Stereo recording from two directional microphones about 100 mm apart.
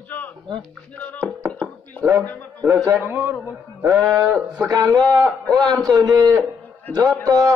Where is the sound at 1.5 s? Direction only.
10° left (ahead or behind).